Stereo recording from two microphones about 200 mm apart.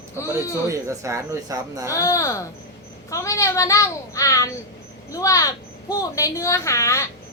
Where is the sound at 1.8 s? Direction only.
15° left (ahead or behind).